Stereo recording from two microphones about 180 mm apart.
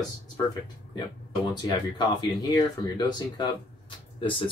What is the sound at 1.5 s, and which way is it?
Speech, 25° left (ahead or behind).